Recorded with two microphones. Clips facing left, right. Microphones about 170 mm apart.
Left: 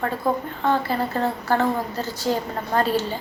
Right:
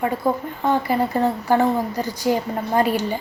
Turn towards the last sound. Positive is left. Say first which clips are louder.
# right 2 dB
turn(degrees=-15)  # may be behind; listen again after turning